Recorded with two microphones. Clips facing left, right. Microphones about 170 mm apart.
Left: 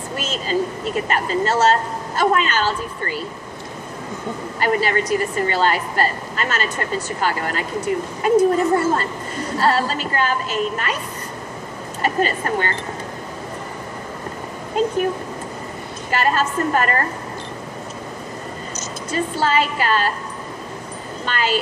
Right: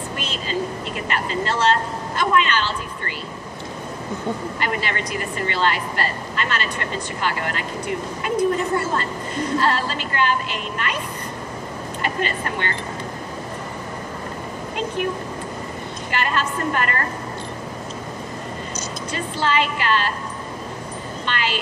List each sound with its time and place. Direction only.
0.2 s a woman's voice: 45° left (ahead or behind)
4.6 s speech: 40° left (ahead or behind)
12.0 s speech: 40° left (ahead or behind)
16.1 s speech: 40° left (ahead or behind)
19.1 s speech: 40° left (ahead or behind)
21.3 s speech: 40° left (ahead or behind)